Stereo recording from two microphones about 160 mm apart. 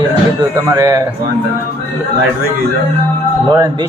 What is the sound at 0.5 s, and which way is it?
Speech, 20° right (ahead or behind).